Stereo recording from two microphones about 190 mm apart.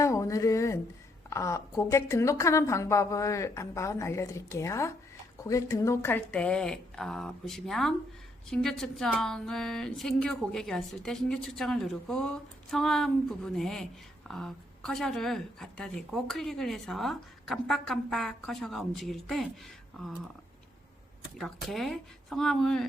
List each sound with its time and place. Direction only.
0.0 s a sound: 15° left (ahead or behind)
1.3 s a woman's voice: 15° left (ahead or behind)
21.3 s speech: centre (ahead or behind)